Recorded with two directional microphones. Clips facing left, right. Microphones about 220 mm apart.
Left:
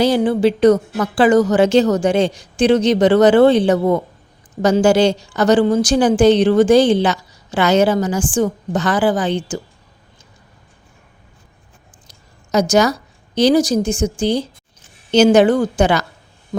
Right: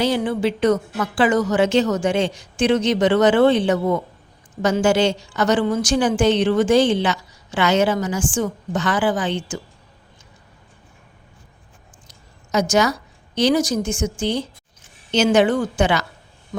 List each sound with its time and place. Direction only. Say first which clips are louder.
0.0 s a woman's voice: left 6 dB; 35° left (ahead or behind)
12.0 s a woman's voice: even; 35° left (ahead or behind)